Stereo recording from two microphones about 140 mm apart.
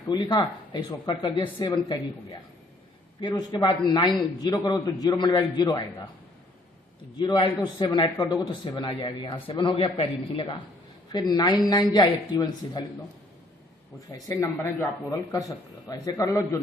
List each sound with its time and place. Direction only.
0.1 s a man's voice: 30° left (ahead or behind)
3.2 s a man's voice: 30° left (ahead or behind)
7.2 s a man's voice: 35° left (ahead or behind)
11.1 s a man's voice: 30° left (ahead or behind)
14.3 s a man's voice: 15° left (ahead or behind)